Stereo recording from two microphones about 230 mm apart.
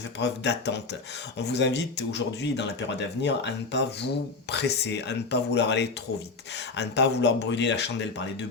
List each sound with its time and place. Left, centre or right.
0.2 s speech: left